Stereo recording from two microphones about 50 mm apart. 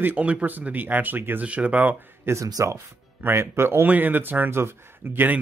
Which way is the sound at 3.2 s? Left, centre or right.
Right.